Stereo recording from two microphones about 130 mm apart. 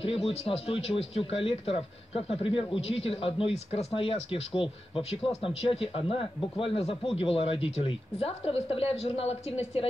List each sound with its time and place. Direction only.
0.0 s speech: 50° left (ahead or behind)